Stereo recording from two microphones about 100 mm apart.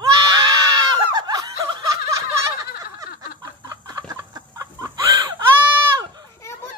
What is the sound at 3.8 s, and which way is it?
Chicken, 40° right (ahead or behind).